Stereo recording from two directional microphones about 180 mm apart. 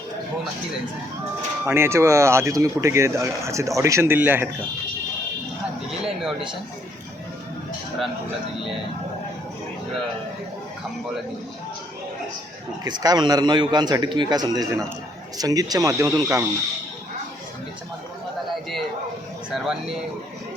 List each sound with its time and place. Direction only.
1.6 s speech: 15° right (ahead or behind)
6.0 s speech: 5° right (ahead or behind)
12.8 s a man's voice: 20° right (ahead or behind)
18.5 s a sound: centre (ahead or behind)
19.5 s speech: centre (ahead or behind)